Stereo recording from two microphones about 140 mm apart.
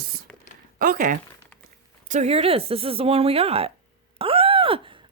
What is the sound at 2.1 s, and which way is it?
Speech, 50° right (ahead or behind).